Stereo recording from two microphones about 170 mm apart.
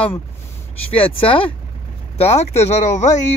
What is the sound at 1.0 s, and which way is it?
Speech, 30° left (ahead or behind).